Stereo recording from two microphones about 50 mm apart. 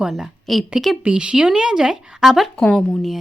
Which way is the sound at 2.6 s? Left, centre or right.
Centre.